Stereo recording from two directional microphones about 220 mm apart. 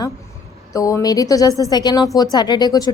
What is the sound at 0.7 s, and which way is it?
A woman's voice, 15° left (ahead or behind).